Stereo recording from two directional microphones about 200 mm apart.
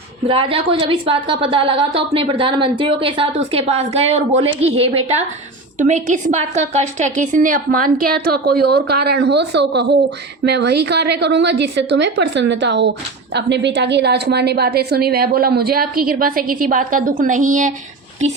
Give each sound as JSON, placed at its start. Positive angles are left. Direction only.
{"t": 0.3, "sound": "a woman's voice", "side_deg": -25}